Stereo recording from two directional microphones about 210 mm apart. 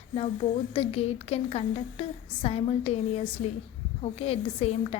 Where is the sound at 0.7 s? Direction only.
30° left (ahead or behind).